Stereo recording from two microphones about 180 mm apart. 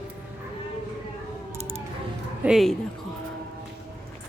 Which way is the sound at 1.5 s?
35° right (ahead or behind).